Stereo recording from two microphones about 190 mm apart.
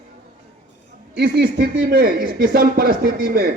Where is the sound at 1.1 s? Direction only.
60° right (ahead or behind).